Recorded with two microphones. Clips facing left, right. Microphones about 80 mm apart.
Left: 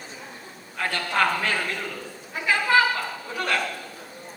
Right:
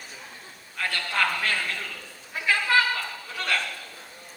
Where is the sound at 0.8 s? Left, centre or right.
Centre.